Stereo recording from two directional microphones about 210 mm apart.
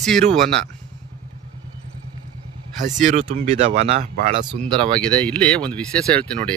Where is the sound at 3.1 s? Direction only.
35° right (ahead or behind).